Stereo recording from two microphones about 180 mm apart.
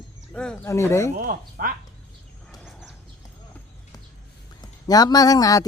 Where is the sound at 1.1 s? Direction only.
50° right (ahead or behind).